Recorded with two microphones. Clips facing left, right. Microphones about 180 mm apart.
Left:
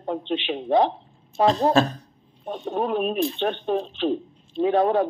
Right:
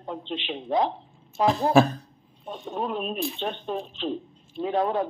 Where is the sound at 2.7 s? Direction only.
65° left (ahead or behind).